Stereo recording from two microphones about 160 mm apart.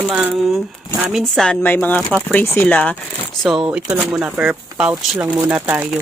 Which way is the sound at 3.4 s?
5° right (ahead or behind).